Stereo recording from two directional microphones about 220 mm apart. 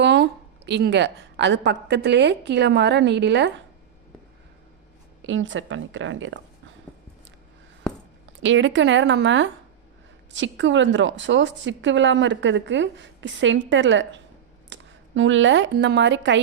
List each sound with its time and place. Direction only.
0.0 s a woman's voice: 55° right (ahead or behind)
5.2 s a woman's voice: 60° right (ahead or behind)
8.4 s a woman's voice: 60° right (ahead or behind)